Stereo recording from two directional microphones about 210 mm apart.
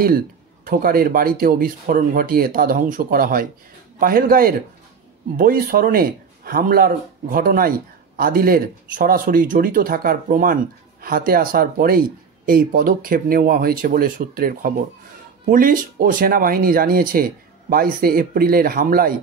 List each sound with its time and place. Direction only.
0.7 s speech: 45° right (ahead or behind)